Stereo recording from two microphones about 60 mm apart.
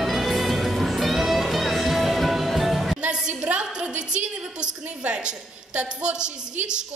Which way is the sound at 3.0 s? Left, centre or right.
Centre.